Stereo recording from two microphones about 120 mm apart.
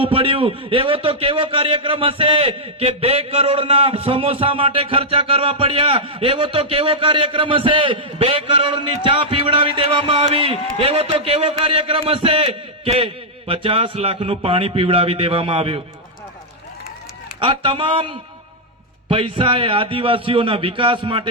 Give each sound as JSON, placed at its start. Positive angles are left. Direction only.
{"t": 0.0, "sound": "a man's voice", "side_deg": -50}
{"t": 17.4, "sound": "a man's voice", "side_deg": -50}